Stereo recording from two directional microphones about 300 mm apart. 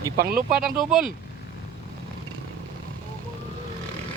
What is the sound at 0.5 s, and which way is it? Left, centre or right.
Speech, centre.